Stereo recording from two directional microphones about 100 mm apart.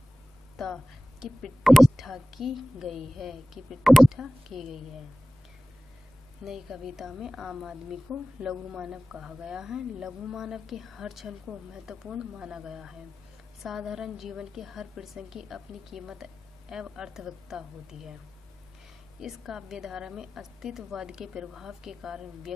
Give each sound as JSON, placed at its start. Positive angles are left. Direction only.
{"t": 1.2, "sound": "a woman's voice", "side_deg": 0}
{"t": 6.4, "sound": "a woman's voice", "side_deg": -5}
{"t": 19.1, "sound": "a woman's voice", "side_deg": -5}